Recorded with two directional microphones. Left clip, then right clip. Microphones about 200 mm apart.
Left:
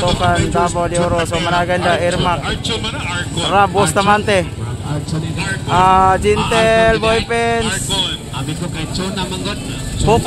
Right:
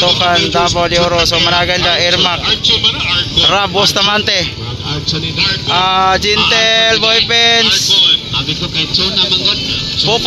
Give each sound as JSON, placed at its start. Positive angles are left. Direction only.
{"t": 0.2, "sound": "speech", "side_deg": -5}
{"t": 2.4, "sound": "speech", "side_deg": 60}
{"t": 3.4, "sound": "speech", "side_deg": -5}
{"t": 5.7, "sound": "speech", "side_deg": 0}
{"t": 7.6, "sound": "speech", "side_deg": 65}